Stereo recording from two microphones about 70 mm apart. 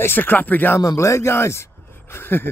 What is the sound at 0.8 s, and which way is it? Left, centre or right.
Speech, left.